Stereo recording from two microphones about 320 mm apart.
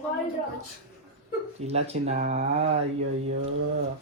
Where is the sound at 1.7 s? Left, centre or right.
Right.